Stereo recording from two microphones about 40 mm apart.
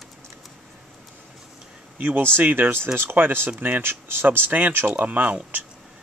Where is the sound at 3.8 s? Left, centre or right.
Right.